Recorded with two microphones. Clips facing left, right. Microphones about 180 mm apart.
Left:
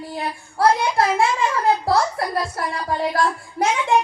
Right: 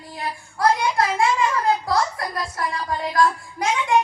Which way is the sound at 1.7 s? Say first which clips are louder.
Left 3 dB; 25° left (ahead or behind).